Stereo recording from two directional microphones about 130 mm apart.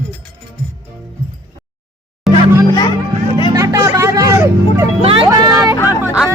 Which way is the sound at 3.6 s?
25° right (ahead or behind).